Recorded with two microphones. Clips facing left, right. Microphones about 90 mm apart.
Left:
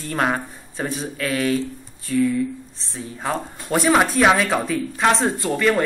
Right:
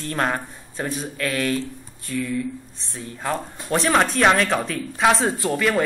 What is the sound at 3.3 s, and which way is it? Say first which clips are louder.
Speech: left 1 dB; 5° left (ahead or behind).